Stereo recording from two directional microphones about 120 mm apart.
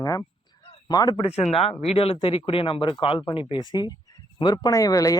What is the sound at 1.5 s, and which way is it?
Speech, 55° left (ahead or behind).